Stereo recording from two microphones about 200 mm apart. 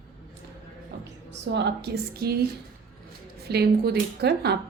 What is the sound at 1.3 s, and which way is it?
Speech, 60° right (ahead or behind).